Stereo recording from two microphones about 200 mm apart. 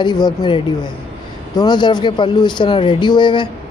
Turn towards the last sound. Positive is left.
turn(degrees=20)  # may be behind; listen again after turning